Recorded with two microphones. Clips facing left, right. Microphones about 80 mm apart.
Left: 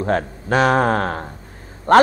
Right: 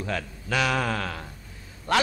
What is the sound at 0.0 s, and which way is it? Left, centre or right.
A man's voice, left.